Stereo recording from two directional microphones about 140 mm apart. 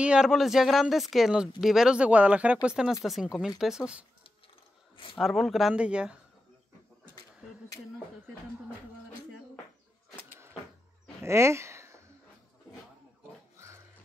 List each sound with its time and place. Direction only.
0.0 s speech: 5° right (ahead or behind)
5.2 s speech: centre (ahead or behind)
11.2 s speech: 20° right (ahead or behind)